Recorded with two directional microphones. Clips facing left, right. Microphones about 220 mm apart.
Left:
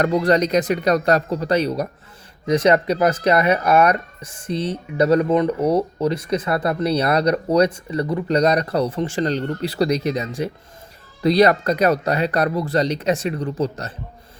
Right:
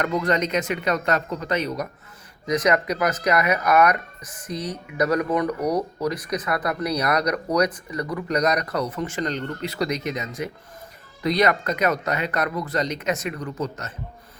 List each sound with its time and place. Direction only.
0.0 s speech: 35° left (ahead or behind)